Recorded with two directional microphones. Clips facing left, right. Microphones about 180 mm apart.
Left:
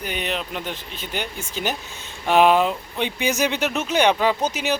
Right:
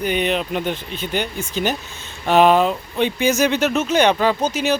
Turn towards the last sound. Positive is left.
turn(degrees=15)  # may be behind; listen again after turning